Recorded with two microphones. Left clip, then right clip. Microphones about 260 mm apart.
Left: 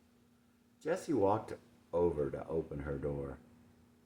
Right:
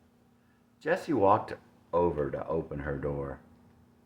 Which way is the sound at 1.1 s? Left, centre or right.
Right.